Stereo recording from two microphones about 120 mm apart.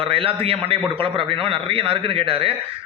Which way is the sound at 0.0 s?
50° right (ahead or behind).